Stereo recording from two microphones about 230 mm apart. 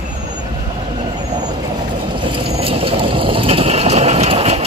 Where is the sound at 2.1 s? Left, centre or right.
Right.